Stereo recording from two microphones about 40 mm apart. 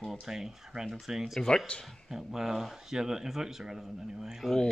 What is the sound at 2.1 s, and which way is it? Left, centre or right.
Speech, centre.